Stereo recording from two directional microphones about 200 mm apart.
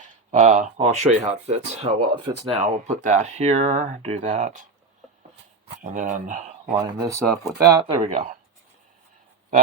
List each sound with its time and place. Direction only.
0.0 s speech: 35° right (ahead or behind)
2.0 s speech: 20° right (ahead or behind)
2.6 s speech: 35° right (ahead or behind)
5.8 s speech: 40° right (ahead or behind)
6.7 s speech: 15° right (ahead or behind); by 8.4 s 35° right (ahead or behind)